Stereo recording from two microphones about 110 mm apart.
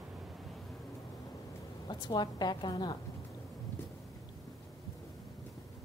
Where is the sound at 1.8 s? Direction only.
40° left (ahead or behind).